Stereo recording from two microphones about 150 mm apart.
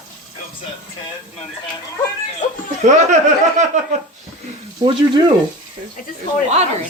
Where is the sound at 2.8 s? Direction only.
55° right (ahead or behind).